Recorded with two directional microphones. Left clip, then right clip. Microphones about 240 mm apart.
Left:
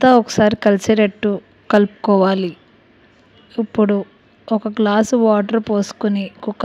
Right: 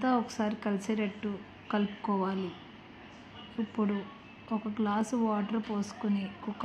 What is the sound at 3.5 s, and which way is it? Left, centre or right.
Speech, left.